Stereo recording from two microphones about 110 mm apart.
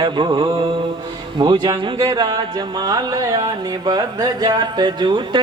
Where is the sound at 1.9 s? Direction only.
40° right (ahead or behind).